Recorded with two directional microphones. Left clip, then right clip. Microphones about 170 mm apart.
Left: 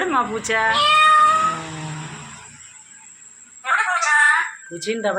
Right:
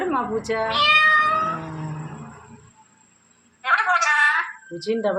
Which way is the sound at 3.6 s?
15° right (ahead or behind).